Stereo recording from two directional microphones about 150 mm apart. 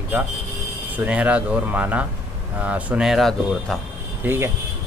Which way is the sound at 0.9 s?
10° right (ahead or behind).